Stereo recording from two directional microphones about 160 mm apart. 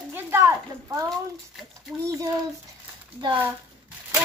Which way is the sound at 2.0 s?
20° right (ahead or behind).